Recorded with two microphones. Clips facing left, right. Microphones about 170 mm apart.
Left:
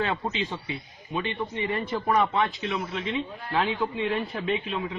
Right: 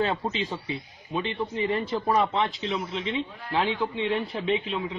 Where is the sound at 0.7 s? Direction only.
30° right (ahead or behind).